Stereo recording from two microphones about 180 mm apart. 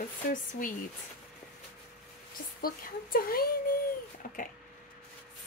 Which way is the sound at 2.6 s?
55° left (ahead or behind).